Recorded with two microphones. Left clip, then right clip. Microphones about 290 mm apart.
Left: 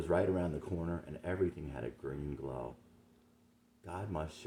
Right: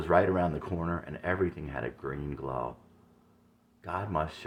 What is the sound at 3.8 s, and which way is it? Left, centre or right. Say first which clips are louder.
Speech: right 9 dB; centre.